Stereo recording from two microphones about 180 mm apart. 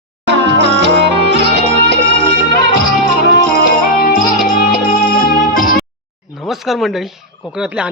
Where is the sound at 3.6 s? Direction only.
55° left (ahead or behind).